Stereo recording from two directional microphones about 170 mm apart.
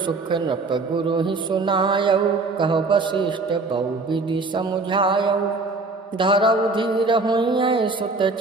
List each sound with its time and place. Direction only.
0.3 s a man's voice: 30° right (ahead or behind)